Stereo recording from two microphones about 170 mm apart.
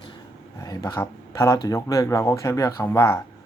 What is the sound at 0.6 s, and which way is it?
Speech, 20° left (ahead or behind).